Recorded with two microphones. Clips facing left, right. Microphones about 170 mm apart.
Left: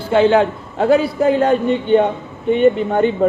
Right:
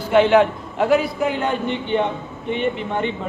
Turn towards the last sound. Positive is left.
turn(degrees=40)  # may be behind; listen again after turning